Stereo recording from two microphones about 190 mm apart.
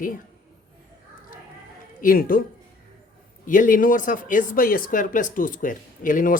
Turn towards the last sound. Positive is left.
turn(degrees=45)  # may be behind; listen again after turning